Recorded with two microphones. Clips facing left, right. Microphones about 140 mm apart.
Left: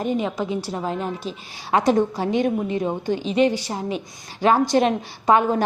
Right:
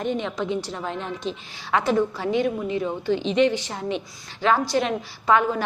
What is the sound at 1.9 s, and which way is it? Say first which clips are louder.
Speech: left 3 dB; 40° left (ahead or behind).